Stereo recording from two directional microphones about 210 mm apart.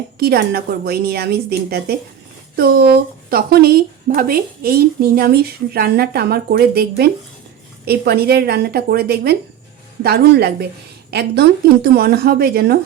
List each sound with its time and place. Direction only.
0.2 s a woman's voice: 50° right (ahead or behind)